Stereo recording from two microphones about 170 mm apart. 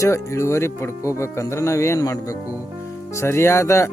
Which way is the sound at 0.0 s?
15° left (ahead or behind).